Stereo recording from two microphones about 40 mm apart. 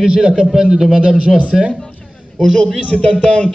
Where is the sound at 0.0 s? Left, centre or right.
Centre.